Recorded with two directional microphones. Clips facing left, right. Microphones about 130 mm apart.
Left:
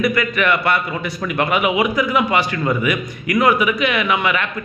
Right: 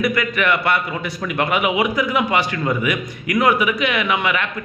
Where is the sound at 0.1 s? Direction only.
15° right (ahead or behind).